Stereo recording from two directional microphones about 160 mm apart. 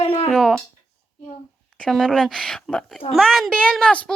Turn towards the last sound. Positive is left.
turn(degrees=5)  # may be behind; listen again after turning